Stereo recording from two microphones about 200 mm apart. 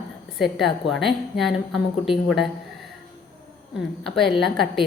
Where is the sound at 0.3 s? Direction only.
Centre (ahead or behind).